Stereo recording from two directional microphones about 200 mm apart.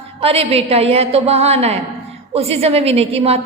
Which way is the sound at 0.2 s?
30° right (ahead or behind).